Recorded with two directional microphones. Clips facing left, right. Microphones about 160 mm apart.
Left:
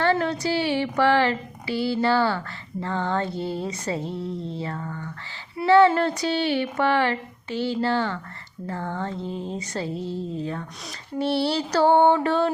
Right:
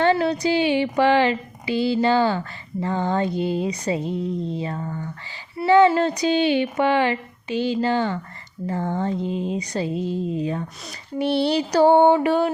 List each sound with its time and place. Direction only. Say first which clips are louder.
0.0 s a woman's voice: right 3 dB; 15° right (ahead or behind)